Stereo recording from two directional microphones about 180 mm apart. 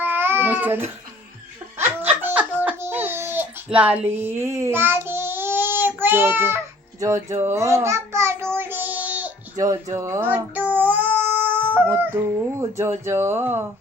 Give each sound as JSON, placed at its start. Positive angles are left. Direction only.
{"t": 0.0, "sound": "babbling", "side_deg": -10}
{"t": 1.8, "sound": "baby laughter", "side_deg": -10}
{"t": 7.0, "sound": "a child's voice", "side_deg": -15}
{"t": 8.5, "sound": "child singing", "side_deg": -10}
{"t": 9.6, "sound": "speech", "side_deg": -20}
{"t": 9.9, "sound": "child singing", "side_deg": -15}
{"t": 13.1, "sound": "speech", "side_deg": -15}